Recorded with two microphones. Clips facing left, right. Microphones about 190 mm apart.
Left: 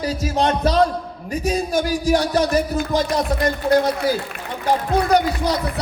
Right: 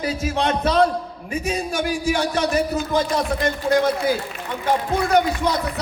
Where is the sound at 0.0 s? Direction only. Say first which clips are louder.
Left 2 dB; 35° left (ahead or behind).